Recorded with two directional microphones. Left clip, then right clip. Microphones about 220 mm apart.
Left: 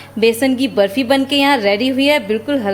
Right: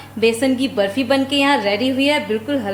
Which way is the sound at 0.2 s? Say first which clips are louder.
Left 3 dB; 30° left (ahead or behind).